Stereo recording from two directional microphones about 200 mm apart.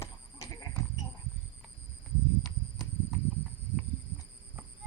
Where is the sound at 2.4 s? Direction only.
Centre (ahead or behind).